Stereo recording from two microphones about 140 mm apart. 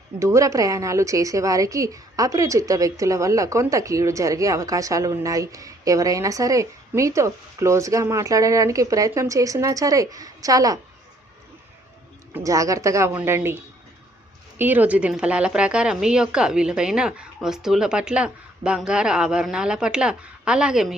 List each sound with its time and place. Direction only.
0.2 s speech: 20° right (ahead or behind)
12.3 s speech: 25° right (ahead or behind)
14.6 s a woman's voice: 10° right (ahead or behind)